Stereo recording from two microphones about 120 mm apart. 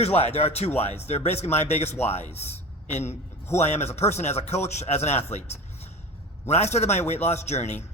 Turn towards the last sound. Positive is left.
turn(degrees=65)  # may be behind; listen again after turning